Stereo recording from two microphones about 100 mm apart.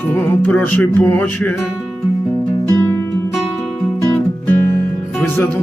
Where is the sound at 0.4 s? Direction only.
20° left (ahead or behind).